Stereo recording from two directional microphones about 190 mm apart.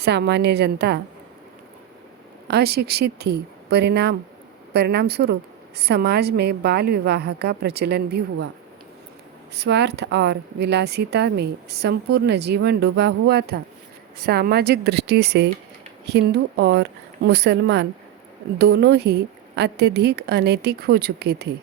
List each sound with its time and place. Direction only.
0.0 s speech: 60° right (ahead or behind)
2.5 s speech: 60° right (ahead or behind)
9.6 s speech: 65° right (ahead or behind)